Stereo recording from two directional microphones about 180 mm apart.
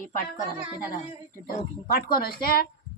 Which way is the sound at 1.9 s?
55° left (ahead or behind).